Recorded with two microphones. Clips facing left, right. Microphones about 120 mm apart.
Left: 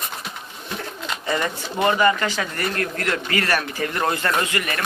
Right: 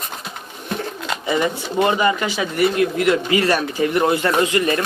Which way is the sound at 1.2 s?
15° right (ahead or behind).